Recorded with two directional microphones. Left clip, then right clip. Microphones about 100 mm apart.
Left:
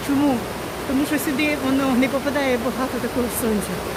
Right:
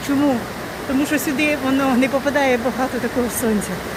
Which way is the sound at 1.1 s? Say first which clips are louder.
Right 4 dB; 5° right (ahead or behind).